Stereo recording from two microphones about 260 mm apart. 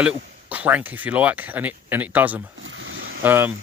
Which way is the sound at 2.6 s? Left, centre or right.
Right.